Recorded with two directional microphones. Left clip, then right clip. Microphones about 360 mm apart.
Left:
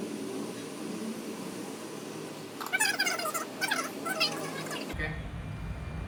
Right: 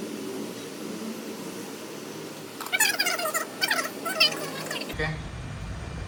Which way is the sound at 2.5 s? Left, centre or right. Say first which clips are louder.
Right 4 dB; centre.